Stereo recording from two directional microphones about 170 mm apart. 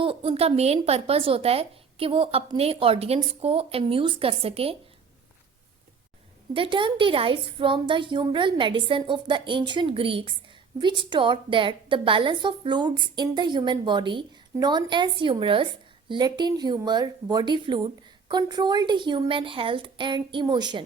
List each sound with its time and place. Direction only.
0.0 s a woman's voice: 30° right (ahead or behind)
6.5 s a woman's voice: 30° right (ahead or behind)